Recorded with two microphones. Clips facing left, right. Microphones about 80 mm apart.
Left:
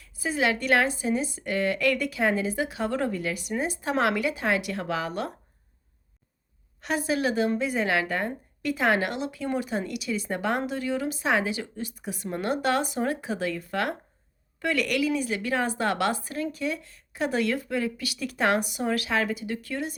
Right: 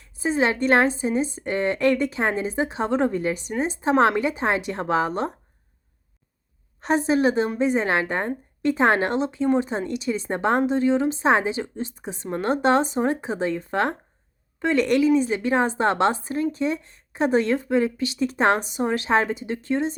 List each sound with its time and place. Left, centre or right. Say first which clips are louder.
0.0 s speech: right 4 dB; right
6.8 s a woman's voice: right 6 dB; right